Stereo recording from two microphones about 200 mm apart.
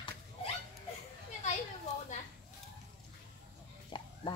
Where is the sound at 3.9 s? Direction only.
25° left (ahead or behind).